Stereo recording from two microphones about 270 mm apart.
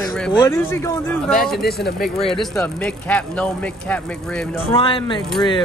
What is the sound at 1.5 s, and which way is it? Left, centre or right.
Speech, left.